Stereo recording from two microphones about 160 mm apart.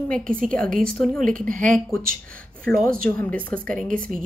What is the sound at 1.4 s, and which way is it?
Speech, 55° right (ahead or behind).